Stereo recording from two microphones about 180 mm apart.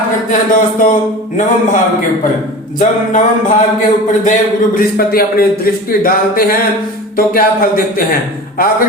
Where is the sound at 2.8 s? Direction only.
45° left (ahead or behind).